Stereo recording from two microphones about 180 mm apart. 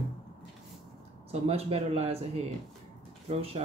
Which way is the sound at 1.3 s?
35° right (ahead or behind).